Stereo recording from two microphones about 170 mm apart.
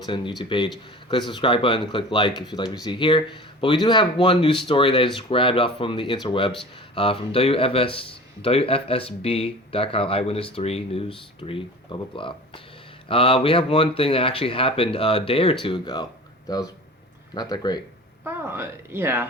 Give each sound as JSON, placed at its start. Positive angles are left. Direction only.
{"t": 0.0, "sound": "speech", "side_deg": 25}
{"t": 18.2, "sound": "speech", "side_deg": -10}